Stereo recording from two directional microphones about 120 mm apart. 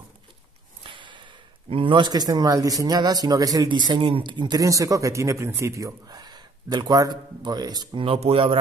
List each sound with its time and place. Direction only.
0.8 s a man's voice: 40° right (ahead or behind)
8.0 s speech: 55° right (ahead or behind)